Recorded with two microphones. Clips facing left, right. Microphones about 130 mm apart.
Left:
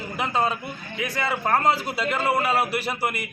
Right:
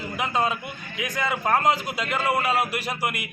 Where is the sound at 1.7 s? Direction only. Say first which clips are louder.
Left 2 dB; 35° left (ahead or behind).